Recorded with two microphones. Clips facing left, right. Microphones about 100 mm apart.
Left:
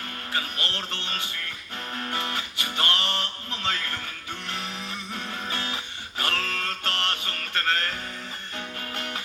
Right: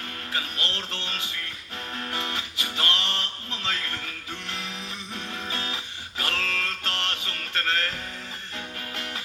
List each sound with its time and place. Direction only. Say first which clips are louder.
0.7 s music: left 1 dB; 30° left (ahead or behind)